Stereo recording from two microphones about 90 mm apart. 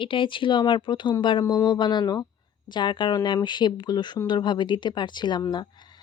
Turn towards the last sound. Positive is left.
turn(degrees=55)  # may be behind; listen again after turning